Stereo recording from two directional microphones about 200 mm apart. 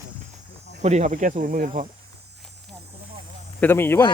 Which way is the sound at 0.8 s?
35° right (ahead or behind).